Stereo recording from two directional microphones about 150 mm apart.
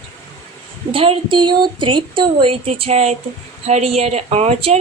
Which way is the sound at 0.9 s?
40° right (ahead or behind).